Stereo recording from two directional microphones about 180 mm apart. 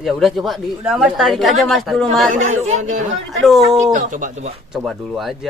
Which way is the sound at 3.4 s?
Centre (ahead or behind).